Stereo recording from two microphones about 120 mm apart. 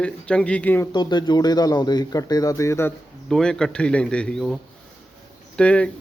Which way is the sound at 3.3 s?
5° left (ahead or behind).